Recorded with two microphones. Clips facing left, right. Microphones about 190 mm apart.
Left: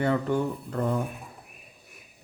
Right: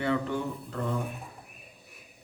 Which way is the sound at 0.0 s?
45° left (ahead or behind).